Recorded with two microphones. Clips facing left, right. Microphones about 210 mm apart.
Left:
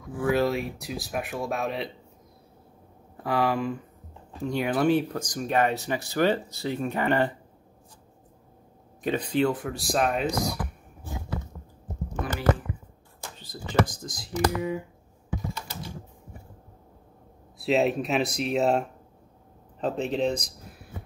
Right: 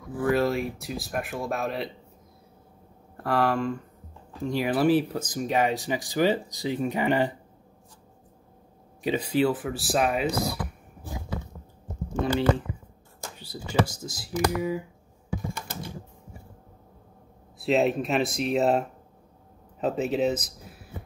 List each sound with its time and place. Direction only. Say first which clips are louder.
0.1 s speech: even; centre (ahead or behind)
3.2 s speech: right 1 dB; centre (ahead or behind)
9.0 s speech: right 1 dB; 10° right (ahead or behind)
12.2 s speech: right 3 dB; 25° right (ahead or behind)
13.9 s speech: right 1 dB; 5° right (ahead or behind)
17.6 s speech: even; centre (ahead or behind)